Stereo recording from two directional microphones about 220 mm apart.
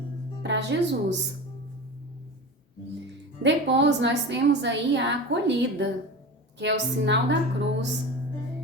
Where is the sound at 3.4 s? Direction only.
55° right (ahead or behind).